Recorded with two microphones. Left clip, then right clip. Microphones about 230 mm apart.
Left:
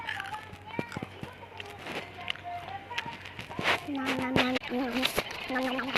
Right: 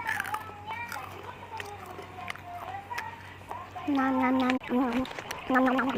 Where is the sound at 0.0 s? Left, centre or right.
Right.